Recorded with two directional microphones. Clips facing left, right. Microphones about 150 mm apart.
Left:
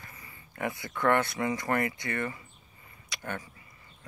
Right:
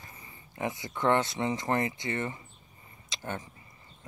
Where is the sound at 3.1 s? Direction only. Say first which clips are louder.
Even; 20° right (ahead or behind).